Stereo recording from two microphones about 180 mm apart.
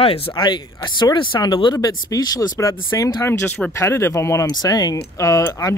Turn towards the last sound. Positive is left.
turn(degrees=15)  # may be behind; listen again after turning